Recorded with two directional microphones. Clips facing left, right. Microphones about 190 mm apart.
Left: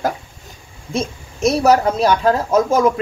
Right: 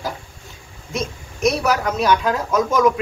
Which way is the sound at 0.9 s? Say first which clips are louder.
Left 3 dB; 30° left (ahead or behind).